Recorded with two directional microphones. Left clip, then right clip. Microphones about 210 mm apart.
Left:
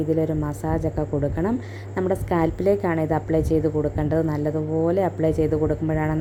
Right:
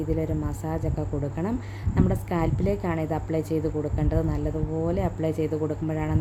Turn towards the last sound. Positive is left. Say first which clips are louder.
# left 5 dB
turn(degrees=0)  # may be behind; listen again after turning